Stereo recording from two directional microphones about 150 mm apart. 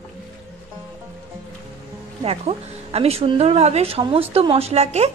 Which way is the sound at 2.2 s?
40° right (ahead or behind).